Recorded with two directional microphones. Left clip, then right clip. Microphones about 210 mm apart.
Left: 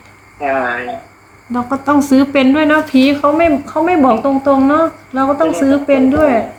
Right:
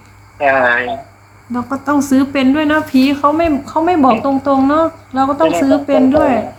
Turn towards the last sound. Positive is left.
turn(degrees=-10)  # may be behind; listen again after turning